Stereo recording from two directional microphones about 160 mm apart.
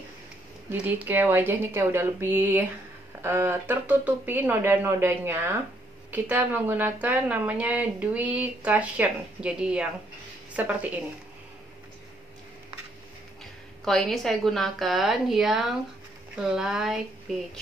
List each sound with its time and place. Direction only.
0.7 s a woman's voice: 10° right (ahead or behind)
13.8 s a woman's voice: centre (ahead or behind)